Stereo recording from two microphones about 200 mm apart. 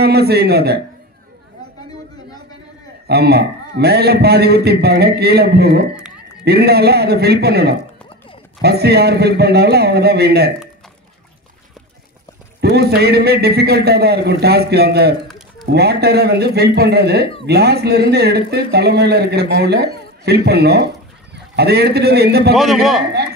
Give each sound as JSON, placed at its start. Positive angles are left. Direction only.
{"t": 0.0, "sound": "a man's voice", "side_deg": -55}
{"t": 3.1, "sound": "a man's voice", "side_deg": -55}
{"t": 12.5, "sound": "a man's voice", "side_deg": -55}
{"t": 22.5, "sound": "a man's voice", "side_deg": 0}